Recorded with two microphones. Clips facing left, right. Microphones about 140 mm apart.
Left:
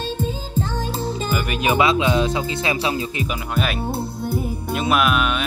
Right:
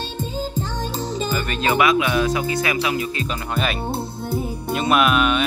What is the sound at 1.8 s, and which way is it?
Speech, 25° left (ahead or behind).